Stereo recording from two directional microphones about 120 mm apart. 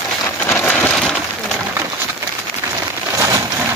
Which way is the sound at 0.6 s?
15° left (ahead or behind).